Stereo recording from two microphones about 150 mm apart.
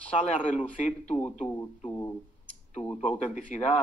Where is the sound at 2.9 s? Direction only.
55° left (ahead or behind).